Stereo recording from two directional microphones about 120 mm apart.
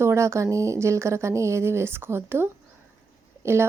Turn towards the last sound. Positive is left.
turn(degrees=-20)  # may be behind; listen again after turning